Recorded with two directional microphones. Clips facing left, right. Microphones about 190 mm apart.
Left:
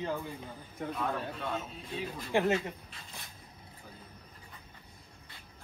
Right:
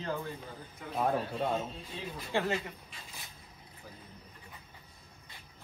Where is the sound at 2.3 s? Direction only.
20° left (ahead or behind).